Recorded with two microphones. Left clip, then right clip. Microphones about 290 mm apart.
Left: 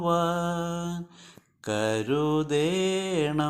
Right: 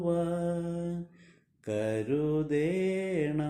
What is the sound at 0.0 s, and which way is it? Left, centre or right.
Mantra, centre.